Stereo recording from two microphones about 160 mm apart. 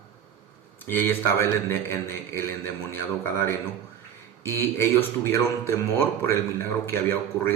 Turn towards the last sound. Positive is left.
turn(degrees=15)  # may be behind; listen again after turning